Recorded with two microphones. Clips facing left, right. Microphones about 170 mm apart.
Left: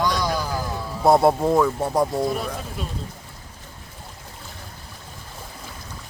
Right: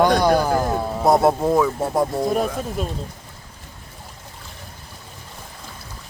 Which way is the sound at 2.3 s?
45° right (ahead or behind).